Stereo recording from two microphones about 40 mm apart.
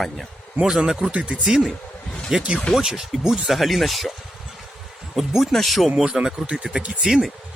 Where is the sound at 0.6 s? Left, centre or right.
Centre.